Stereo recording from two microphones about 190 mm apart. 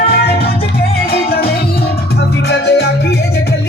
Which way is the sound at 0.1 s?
55° left (ahead or behind).